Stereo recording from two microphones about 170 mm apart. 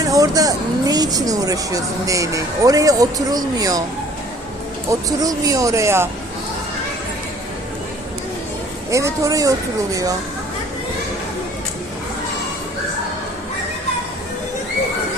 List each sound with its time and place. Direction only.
0.1 s speech: 20° right (ahead or behind)
4.9 s speech: 20° right (ahead or behind)
8.9 s speech: 20° right (ahead or behind)